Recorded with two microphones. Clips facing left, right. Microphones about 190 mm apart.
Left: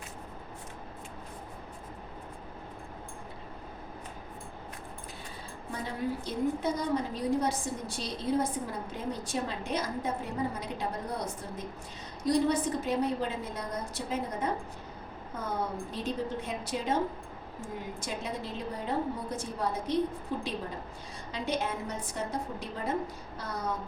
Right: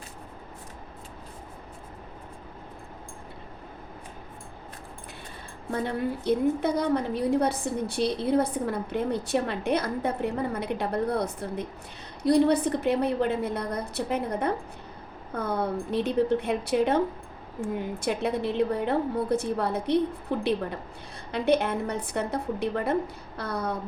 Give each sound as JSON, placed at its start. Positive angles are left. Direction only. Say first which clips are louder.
{"t": 5.8, "sound": "a woman's voice", "louder": "right 5 dB", "side_deg": -65}
{"t": 18.0, "sound": "a woman's voice", "louder": "right 11 dB", "side_deg": -65}